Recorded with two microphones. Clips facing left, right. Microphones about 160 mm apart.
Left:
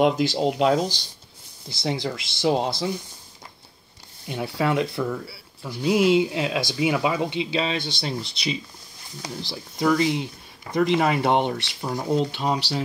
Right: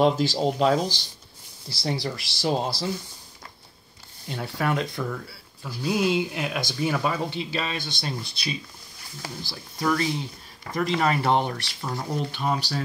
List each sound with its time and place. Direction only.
0.3 s speech: 10° left (ahead or behind)
1.7 s speech: 20° left (ahead or behind)
4.3 s speech: 20° left (ahead or behind)